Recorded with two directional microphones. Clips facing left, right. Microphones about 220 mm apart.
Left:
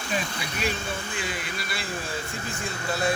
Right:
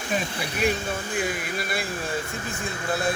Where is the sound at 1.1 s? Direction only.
50° right (ahead or behind).